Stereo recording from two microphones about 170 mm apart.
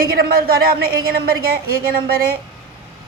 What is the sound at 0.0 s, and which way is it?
Speech, 60° right (ahead or behind).